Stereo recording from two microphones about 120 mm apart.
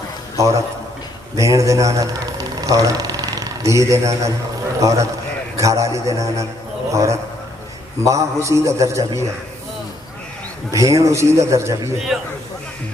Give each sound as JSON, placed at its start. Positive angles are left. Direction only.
{"t": 0.3, "sound": "a man's voice", "side_deg": -25}
{"t": 10.7, "sound": "a man's voice", "side_deg": -25}
{"t": 12.1, "sound": "a man's voice", "side_deg": -5}